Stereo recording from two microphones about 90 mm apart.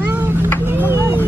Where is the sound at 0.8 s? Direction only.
20° right (ahead or behind).